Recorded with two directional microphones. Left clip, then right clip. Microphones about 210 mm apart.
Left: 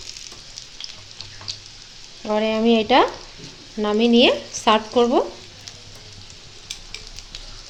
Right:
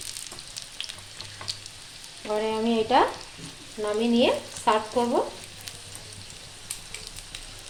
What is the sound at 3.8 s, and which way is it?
Frying, 55° left (ahead or behind).